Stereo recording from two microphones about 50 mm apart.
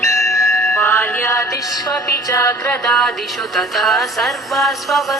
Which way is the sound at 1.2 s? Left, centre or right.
Left.